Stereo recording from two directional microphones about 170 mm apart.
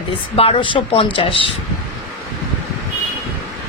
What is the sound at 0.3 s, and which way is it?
A woman's voice, 35° left (ahead or behind).